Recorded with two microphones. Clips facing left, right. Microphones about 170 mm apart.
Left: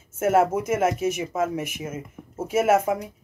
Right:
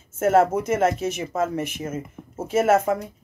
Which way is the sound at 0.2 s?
10° left (ahead or behind).